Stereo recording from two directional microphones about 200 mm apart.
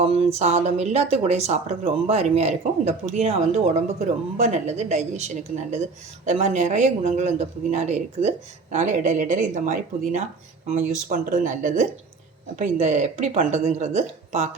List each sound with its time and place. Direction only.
0.0 s speech: 30° right (ahead or behind)